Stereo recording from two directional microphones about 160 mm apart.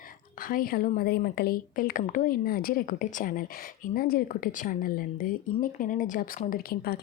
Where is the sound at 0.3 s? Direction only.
60° left (ahead or behind).